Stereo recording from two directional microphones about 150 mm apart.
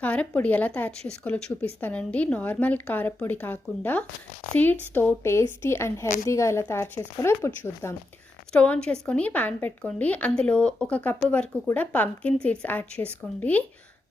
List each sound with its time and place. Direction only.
0.0 s a woman's voice: 10° left (ahead or behind)